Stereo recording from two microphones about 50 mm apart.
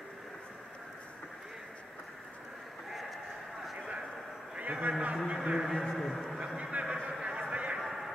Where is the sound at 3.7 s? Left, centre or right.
Right.